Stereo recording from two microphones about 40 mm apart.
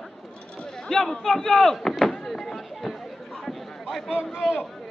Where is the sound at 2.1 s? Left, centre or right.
Centre.